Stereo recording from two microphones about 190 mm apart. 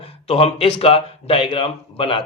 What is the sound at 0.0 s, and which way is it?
A man's voice, 30° left (ahead or behind).